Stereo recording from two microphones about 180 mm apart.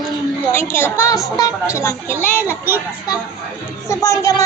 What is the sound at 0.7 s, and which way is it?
Speech, 15° left (ahead or behind).